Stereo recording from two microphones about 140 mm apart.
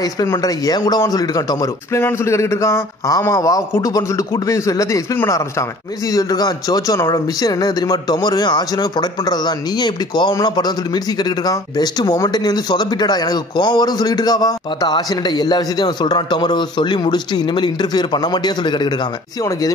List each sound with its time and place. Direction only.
0.0 s speech: 25° left (ahead or behind)